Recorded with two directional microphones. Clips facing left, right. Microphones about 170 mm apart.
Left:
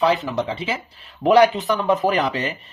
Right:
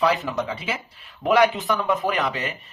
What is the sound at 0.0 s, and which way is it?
Speech, 25° left (ahead or behind).